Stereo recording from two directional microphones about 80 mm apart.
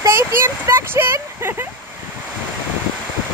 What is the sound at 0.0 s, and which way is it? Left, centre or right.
Speech, right.